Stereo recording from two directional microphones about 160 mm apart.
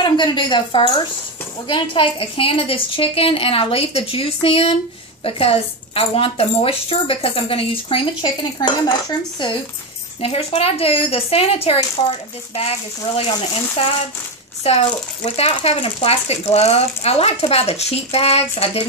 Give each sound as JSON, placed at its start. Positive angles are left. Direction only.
{"t": 0.0, "sound": "a woman's voice", "side_deg": 30}
{"t": 10.2, "sound": "speech", "side_deg": 35}